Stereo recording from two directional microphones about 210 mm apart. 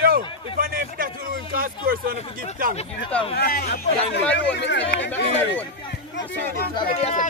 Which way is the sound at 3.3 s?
45° left (ahead or behind).